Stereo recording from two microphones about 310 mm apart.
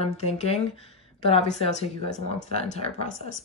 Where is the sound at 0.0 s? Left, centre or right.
Centre.